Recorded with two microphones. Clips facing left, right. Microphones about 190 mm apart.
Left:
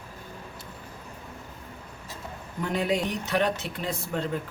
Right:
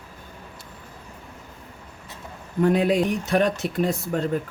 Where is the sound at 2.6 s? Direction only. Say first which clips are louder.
Right 7 dB; 50° right (ahead or behind).